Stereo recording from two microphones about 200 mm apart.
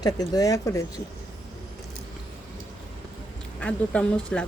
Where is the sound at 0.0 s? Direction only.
20° left (ahead or behind).